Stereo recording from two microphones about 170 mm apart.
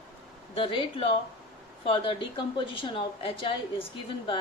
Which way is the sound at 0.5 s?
30° left (ahead or behind).